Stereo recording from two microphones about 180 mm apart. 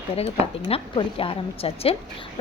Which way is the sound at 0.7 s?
30° left (ahead or behind).